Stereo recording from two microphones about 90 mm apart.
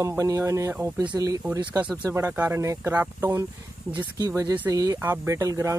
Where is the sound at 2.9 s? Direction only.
20° right (ahead or behind).